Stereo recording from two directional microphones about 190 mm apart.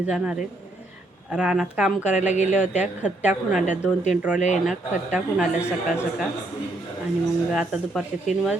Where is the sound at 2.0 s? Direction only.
40° left (ahead or behind).